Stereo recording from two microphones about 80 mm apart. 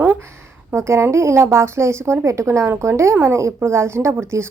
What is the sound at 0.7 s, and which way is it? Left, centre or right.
A woman's voice, right.